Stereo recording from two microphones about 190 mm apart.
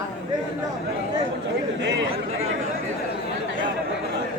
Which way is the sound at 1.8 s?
65° right (ahead or behind).